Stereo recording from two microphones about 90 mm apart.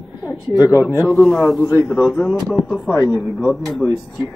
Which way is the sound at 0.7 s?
30° left (ahead or behind).